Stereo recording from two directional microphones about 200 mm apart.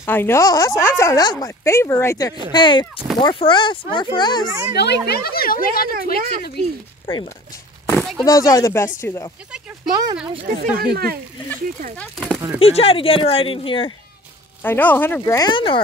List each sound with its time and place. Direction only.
0.0 s speech: 10° left (ahead or behind)
4.5 s a woman's voice: 15° right (ahead or behind)
4.7 s a woman's voice: 55° left (ahead or behind)
7.9 s a sound: centre (ahead or behind)
8.3 s speech: 15° left (ahead or behind)
9.8 s speech: 20° right (ahead or behind)
10.3 s speech: 40° right (ahead or behind)
10.8 s speech: 50° right (ahead or behind)
12.0 s speech: centre (ahead or behind)
12.5 s speech: 30° left (ahead or behind)
14.6 s speech: 10° left (ahead or behind); by 15.8 s 25° left (ahead or behind)